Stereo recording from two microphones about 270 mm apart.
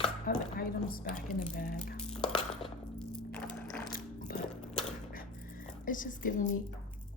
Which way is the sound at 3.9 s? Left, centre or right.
Left.